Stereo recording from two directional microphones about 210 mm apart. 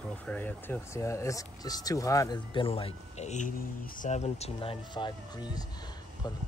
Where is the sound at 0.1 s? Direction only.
5° left (ahead or behind).